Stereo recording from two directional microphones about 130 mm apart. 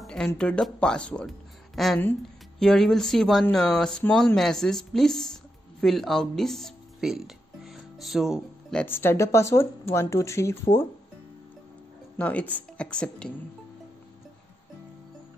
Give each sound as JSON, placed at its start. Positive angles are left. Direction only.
{"t": 0.0, "sound": "a sound", "side_deg": 5}
{"t": 0.4, "sound": "a woman's voice", "side_deg": 5}
{"t": 8.8, "sound": "speech", "side_deg": 15}
{"t": 12.2, "sound": "speech", "side_deg": 10}